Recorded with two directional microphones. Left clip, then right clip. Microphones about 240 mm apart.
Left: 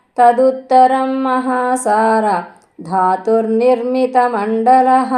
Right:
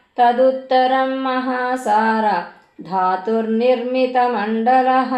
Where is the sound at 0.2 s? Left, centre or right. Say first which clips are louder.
Left 3 dB; left.